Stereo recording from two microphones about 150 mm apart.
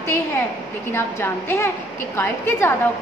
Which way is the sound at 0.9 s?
15° left (ahead or behind).